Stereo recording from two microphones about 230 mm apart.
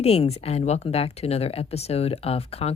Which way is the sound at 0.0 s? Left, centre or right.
Left.